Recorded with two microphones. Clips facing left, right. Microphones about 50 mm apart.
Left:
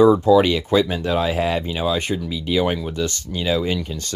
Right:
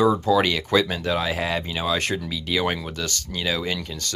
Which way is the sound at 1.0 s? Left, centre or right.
Left.